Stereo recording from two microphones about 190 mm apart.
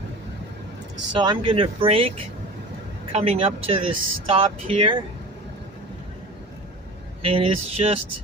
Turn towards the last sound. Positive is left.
turn(degrees=-30)  # may be behind; listen again after turning